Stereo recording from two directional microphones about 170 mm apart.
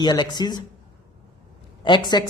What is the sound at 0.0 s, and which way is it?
Speech, 25° left (ahead or behind).